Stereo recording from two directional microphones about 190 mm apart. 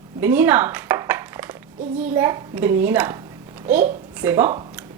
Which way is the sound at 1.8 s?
40° right (ahead or behind).